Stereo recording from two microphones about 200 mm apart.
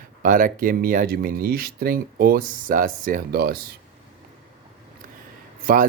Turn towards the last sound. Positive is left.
turn(degrees=-45)  # may be behind; listen again after turning